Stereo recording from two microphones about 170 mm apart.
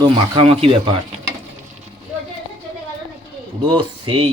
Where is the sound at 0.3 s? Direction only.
35° right (ahead or behind).